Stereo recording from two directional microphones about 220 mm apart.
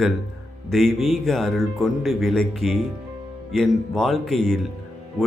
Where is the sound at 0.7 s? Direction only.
Centre (ahead or behind).